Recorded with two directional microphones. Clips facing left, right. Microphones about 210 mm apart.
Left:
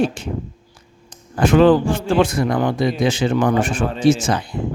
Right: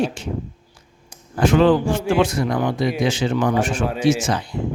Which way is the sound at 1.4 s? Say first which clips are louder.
Left 3 dB; 50° left (ahead or behind).